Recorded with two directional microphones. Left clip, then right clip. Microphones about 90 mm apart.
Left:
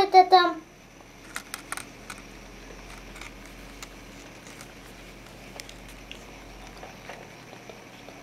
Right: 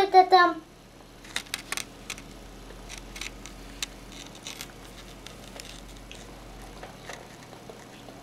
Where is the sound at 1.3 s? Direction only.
25° right (ahead or behind).